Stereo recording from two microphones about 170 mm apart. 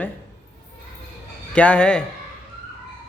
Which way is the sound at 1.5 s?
5° left (ahead or behind).